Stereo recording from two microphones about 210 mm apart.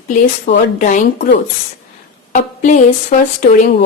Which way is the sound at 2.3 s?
35° left (ahead or behind).